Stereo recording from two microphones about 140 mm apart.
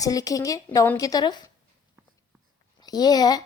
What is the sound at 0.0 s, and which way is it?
A woman's voice, 25° left (ahead or behind).